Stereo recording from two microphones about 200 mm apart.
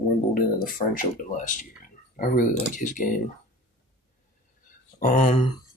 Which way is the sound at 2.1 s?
40° left (ahead or behind).